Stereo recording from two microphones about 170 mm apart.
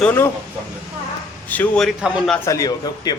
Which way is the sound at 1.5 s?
5° left (ahead or behind).